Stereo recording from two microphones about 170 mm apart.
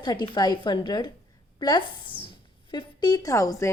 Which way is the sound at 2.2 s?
30° left (ahead or behind).